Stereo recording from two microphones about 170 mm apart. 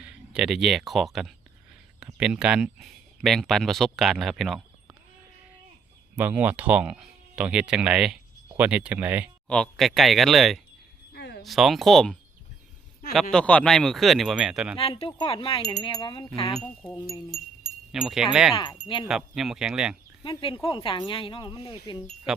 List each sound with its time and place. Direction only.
0.0 s speech: 5° right (ahead or behind)
6.1 s speech: 10° right (ahead or behind)
9.5 s speech: 5° left (ahead or behind)
11.1 s a sound: 70° left (ahead or behind)
11.4 s speech: centre (ahead or behind)
13.3 s speech: 5° left (ahead or behind)
14.8 s wind chime: 35° left (ahead or behind)
16.9 s chime: 25° left (ahead or behind)
17.9 s speech: 5° right (ahead or behind)
18.5 s chime: 25° left (ahead or behind)
19.0 s speech: 5° right (ahead or behind)
20.2 s wind chime: 30° left (ahead or behind)
22.3 s speech: 5° right (ahead or behind)